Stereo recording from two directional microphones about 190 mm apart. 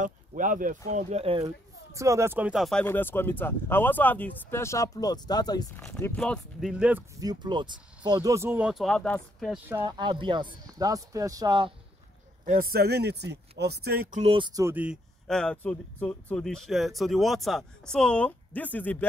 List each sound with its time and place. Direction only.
0.0 s speech: 40° right (ahead or behind)
2.0 s speech: 15° right (ahead or behind); by 5.7 s 20° left (ahead or behind)
5.8 s speech: 5° left (ahead or behind)
6.7 s speech: 5° right (ahead or behind)
7.2 s speech: 25° right (ahead or behind); by 9.6 s 5° left (ahead or behind)
9.7 s speech: 10° right (ahead or behind)
9.9 s a man's voice: 25° right (ahead or behind)
12.7 s speech: 55° right (ahead or behind)
14.2 s speech: 25° right (ahead or behind); by 19.0 s 10° left (ahead or behind)